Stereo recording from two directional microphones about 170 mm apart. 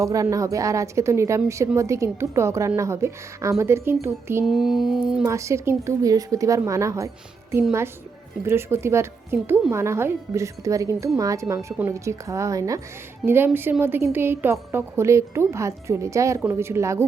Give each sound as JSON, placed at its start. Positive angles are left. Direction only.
{"t": 0.0, "sound": "a woman's voice", "side_deg": -20}
{"t": 4.4, "sound": "a sound", "side_deg": 0}
{"t": 5.2, "sound": "a woman's voice", "side_deg": -15}
{"t": 8.4, "sound": "a woman's voice", "side_deg": -15}